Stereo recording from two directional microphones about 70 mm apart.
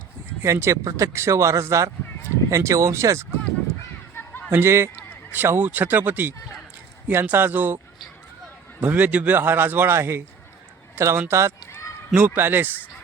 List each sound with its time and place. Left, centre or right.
0.4 s speech: right
4.1 s a sound: left
4.5 s speech: right
5.3 s speech: right
8.8 s speech: right
12.1 s speech: right